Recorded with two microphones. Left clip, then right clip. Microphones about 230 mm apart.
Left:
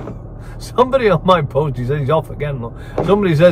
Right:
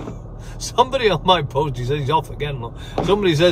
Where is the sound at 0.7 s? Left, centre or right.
Centre.